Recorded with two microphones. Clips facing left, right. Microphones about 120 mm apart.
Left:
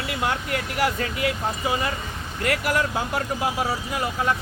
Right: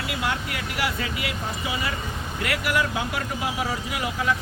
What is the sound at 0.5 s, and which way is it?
Speech, 45° left (ahead or behind).